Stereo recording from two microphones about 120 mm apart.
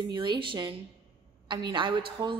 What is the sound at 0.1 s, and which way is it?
A woman's voice, 45° right (ahead or behind).